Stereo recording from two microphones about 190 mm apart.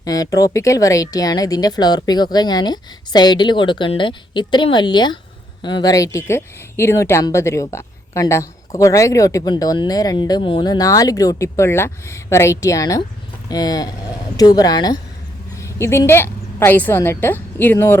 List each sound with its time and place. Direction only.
0.0 s a woman's voice: 20° left (ahead or behind)